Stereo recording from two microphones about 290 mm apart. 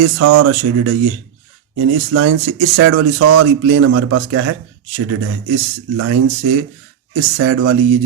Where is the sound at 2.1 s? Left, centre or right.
Right.